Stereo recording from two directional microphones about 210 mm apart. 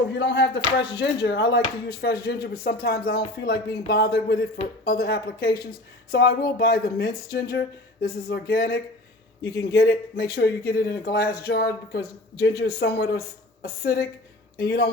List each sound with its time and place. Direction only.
0.1 s speech: 55° left (ahead or behind)